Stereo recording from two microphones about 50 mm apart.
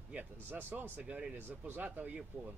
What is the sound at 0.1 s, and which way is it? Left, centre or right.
Speech, right.